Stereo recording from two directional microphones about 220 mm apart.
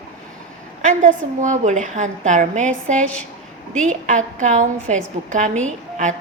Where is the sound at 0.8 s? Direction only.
35° right (ahead or behind).